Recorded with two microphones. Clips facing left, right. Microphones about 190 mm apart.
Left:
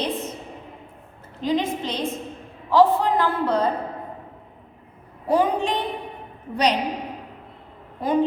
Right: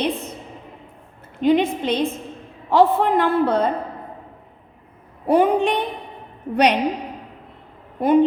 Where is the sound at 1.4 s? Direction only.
60° right (ahead or behind).